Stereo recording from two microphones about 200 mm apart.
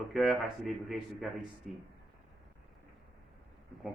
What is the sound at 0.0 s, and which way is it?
A man's voice, centre (ahead or behind).